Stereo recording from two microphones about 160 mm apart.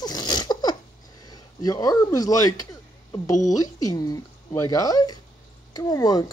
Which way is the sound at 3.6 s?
20° left (ahead or behind).